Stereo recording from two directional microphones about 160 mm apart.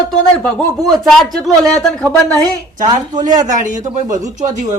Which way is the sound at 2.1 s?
25° right (ahead or behind).